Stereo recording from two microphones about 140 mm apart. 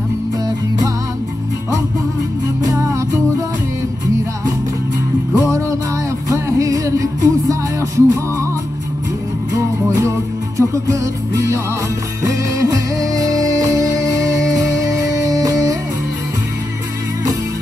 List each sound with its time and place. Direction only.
2.6 s music: 25° right (ahead or behind)
5.3 s music: 20° right (ahead or behind)
10.6 s music: 20° right (ahead or behind)
12.2 s music: 25° right (ahead or behind)